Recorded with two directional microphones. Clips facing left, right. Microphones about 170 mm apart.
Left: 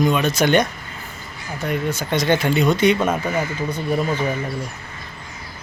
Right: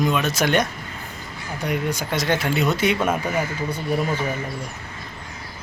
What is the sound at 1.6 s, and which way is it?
Speech, 15° right (ahead or behind).